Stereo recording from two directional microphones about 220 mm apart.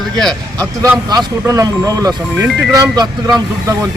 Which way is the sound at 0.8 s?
15° right (ahead or behind).